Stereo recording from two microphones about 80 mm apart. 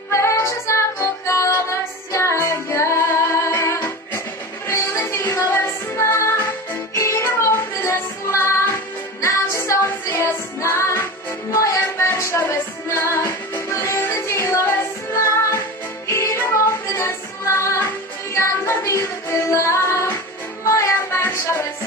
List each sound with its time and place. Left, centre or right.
0.1 s music: left
16.1 s music: left